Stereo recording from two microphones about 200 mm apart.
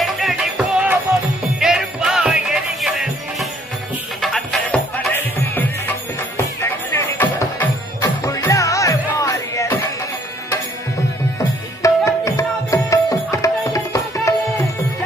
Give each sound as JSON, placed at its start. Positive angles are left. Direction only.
{"t": 0.0, "sound": "music", "side_deg": 0}
{"t": 11.3, "sound": "tabla", "side_deg": 15}